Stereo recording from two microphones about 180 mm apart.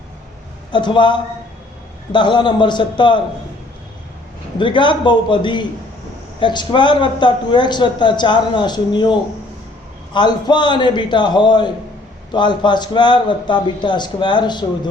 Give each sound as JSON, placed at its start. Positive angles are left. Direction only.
{"t": 0.7, "sound": "a man's voice", "side_deg": 25}
{"t": 4.6, "sound": "a man's voice", "side_deg": 25}